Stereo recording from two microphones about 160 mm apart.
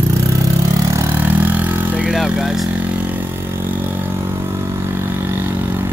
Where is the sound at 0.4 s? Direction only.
20° right (ahead or behind).